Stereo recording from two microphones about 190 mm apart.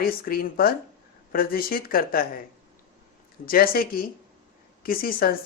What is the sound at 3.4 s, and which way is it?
A woman's voice, 50° left (ahead or behind).